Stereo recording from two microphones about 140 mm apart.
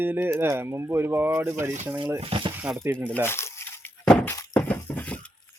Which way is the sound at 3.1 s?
15° left (ahead or behind).